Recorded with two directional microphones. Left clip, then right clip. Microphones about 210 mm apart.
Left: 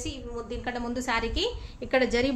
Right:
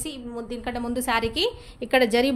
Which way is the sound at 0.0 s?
50° right (ahead or behind).